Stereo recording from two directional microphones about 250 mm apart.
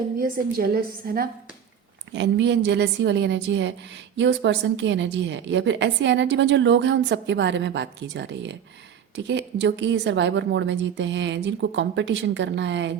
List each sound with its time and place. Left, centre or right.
0.2 s a woman's voice: right